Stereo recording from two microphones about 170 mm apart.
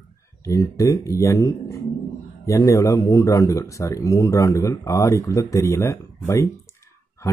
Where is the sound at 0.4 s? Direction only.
20° left (ahead or behind).